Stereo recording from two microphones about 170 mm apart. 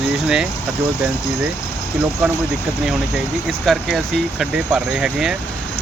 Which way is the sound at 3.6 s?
Centre (ahead or behind).